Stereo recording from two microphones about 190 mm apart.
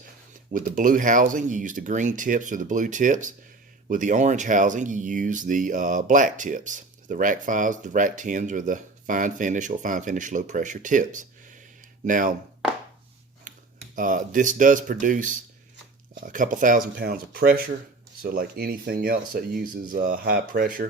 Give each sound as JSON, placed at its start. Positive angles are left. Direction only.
{"t": 0.5, "sound": "speech", "side_deg": -45}
{"t": 13.5, "sound": "a sound", "side_deg": -40}
{"t": 13.9, "sound": "speech", "side_deg": -45}